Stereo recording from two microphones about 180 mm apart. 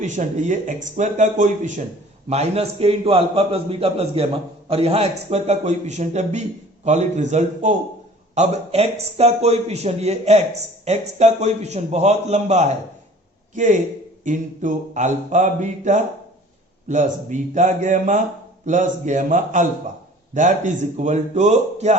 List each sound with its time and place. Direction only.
0.0 s a man's voice: 40° right (ahead or behind)